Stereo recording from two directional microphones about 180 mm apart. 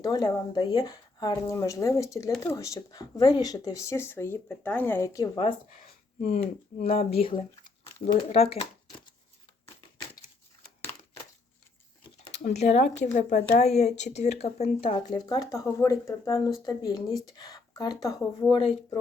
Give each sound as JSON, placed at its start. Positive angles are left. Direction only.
{"t": 0.0, "sound": "speech", "side_deg": 20}
{"t": 6.2, "sound": "speech", "side_deg": 35}
{"t": 12.3, "sound": "speech", "side_deg": 40}
{"t": 18.5, "sound": "speech", "side_deg": 30}